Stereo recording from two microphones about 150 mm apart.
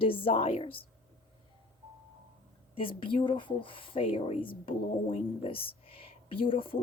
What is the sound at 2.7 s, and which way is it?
Speech, 35° left (ahead or behind).